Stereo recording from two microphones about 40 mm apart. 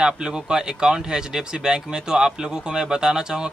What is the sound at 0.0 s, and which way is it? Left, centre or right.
Speech, centre.